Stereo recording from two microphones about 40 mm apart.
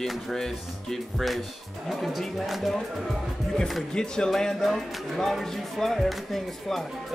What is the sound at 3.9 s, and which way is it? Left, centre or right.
Speech, centre.